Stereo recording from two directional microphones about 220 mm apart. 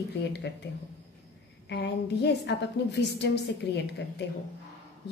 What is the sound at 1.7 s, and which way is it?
A woman's voice, 50° left (ahead or behind).